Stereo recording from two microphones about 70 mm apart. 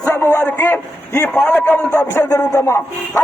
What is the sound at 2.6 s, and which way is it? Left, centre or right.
Speech, left.